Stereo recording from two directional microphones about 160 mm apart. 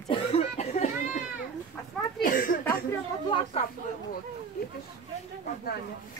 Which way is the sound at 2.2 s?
60° left (ahead or behind).